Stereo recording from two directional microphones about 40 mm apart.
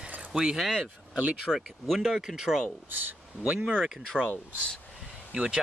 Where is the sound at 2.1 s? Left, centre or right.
Centre.